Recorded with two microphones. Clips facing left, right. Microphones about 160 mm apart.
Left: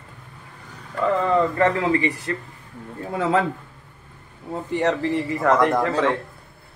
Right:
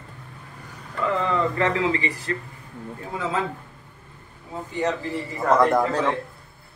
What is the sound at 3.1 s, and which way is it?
Speech, 65° left (ahead or behind).